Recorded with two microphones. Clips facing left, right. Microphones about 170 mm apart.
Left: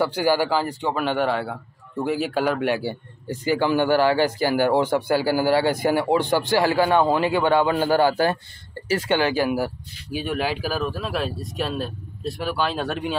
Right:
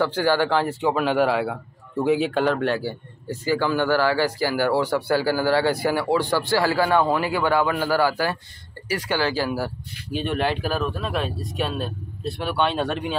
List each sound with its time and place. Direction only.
0.0 s a man's voice: 10° left (ahead or behind)
10.1 s speech: 5° left (ahead or behind)